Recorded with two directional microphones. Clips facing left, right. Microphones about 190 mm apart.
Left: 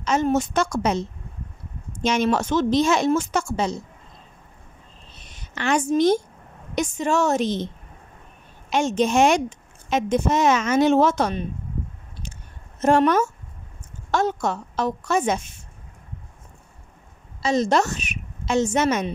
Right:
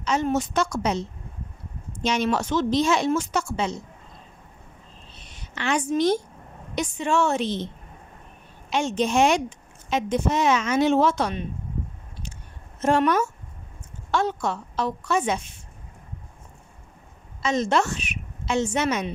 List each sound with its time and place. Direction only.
0.0 s a woman's voice: 45° left (ahead or behind)
2.0 s a woman's voice: 45° left (ahead or behind)
5.5 s a woman's voice: 45° left (ahead or behind)
8.6 s a woman's voice: 45° left (ahead or behind)
12.8 s a woman's voice: 45° left (ahead or behind)
17.4 s a woman's voice: 35° left (ahead or behind)